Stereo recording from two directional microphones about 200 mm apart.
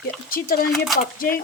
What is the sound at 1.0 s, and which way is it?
Speech, 45° left (ahead or behind).